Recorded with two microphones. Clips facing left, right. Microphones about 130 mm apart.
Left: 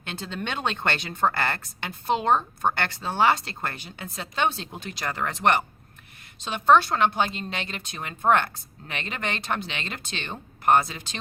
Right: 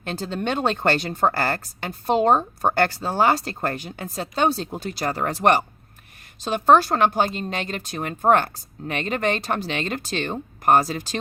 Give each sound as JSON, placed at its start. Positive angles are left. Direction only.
{"t": 0.0, "sound": "speech", "side_deg": -40}